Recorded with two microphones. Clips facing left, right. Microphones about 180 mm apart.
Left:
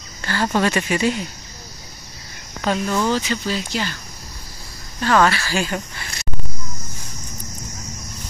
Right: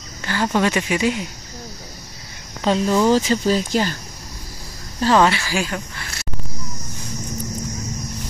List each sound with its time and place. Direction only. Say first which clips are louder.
0.2 s a sound: even; 15° right (ahead or behind)
0.6 s speech: even; 15° right (ahead or behind)
2.6 s speech: right 3 dB; 25° right (ahead or behind)
3.1 s speech: right 5 dB; 40° right (ahead or behind)
5.0 s speech: right 1 dB; 25° right (ahead or behind)
5.5 s a sound: left 1 dB; centre (ahead or behind)